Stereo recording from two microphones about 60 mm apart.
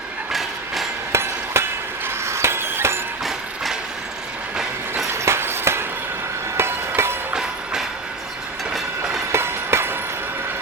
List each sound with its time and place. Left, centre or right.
0.3 s train: centre
1.1 s hammer: right
2.0 s mechanisms: right
3.2 s train: centre
5.1 s a sound: right
6.6 s train: right
7.3 s train: centre
9.3 s train: right